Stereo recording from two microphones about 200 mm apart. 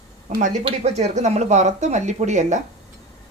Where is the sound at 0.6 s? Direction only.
30° right (ahead or behind).